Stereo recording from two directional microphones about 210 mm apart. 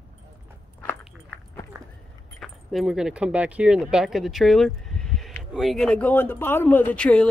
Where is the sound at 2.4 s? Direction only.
Centre (ahead or behind).